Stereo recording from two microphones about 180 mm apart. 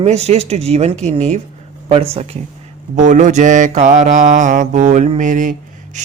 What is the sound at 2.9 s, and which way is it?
Speech, 45° right (ahead or behind).